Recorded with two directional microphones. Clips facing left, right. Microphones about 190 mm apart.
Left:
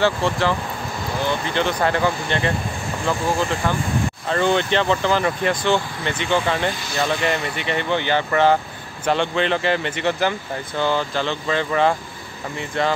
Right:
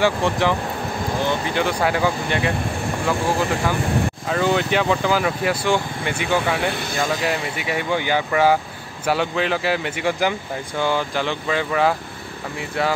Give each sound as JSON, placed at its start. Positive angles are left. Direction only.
{"t": 0.0, "sound": "speech", "side_deg": -15}
{"t": 4.3, "sound": "speech", "side_deg": -5}
{"t": 6.7, "sound": "speech", "side_deg": -55}
{"t": 7.0, "sound": "speech", "side_deg": -5}